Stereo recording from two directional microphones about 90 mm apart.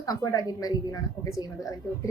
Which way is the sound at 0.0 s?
40° left (ahead or behind).